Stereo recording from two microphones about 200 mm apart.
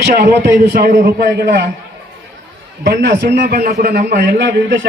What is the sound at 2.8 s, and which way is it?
A man's voice, 60° right (ahead or behind).